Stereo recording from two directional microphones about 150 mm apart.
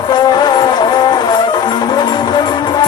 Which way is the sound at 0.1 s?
30° left (ahead or behind).